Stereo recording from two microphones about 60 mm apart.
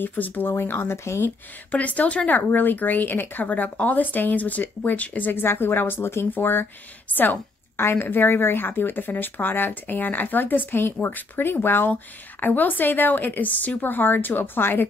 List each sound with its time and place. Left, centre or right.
0.0 s speech: left
1.2 s speech: left